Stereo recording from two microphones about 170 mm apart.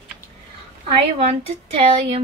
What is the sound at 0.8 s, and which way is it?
A woman's voice, 35° right (ahead or behind).